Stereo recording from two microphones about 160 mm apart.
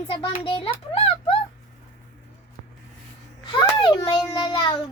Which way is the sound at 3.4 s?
30° left (ahead or behind).